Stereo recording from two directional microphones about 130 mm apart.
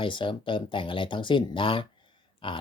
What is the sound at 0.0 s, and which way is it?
Speech, 40° left (ahead or behind).